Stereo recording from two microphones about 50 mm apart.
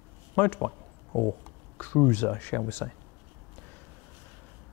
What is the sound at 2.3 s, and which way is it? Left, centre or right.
Speech, left.